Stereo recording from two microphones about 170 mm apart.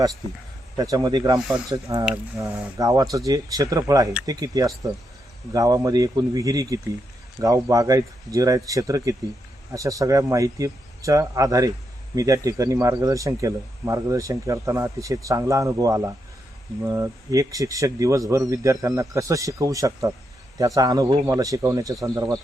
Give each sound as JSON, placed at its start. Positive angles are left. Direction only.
{"t": 0.8, "sound": "speech", "side_deg": -20}